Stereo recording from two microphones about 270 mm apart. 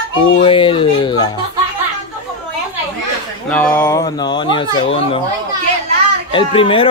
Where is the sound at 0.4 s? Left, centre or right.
Centre.